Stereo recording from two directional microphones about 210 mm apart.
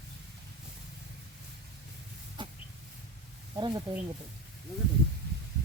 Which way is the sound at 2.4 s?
20° right (ahead or behind).